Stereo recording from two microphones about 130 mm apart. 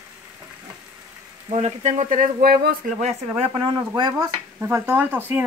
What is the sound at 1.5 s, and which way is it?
Speech, 65° right (ahead or behind).